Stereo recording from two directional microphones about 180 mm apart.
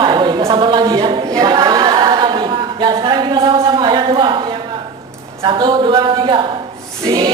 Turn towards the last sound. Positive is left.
turn(degrees=-20)  # may be behind; listen again after turning